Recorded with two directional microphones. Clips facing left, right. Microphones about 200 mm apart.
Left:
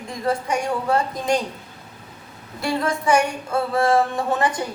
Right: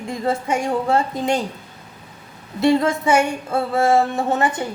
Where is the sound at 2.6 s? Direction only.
25° right (ahead or behind).